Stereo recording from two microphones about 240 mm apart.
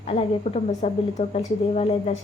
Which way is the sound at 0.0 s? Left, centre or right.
Left.